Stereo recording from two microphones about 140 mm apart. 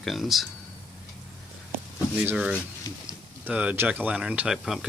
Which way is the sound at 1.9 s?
10° right (ahead or behind).